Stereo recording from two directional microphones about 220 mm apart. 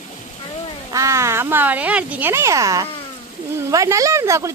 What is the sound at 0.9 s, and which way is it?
Speech, 15° right (ahead or behind).